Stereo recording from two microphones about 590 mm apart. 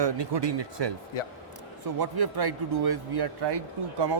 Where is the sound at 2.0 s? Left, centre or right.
Right.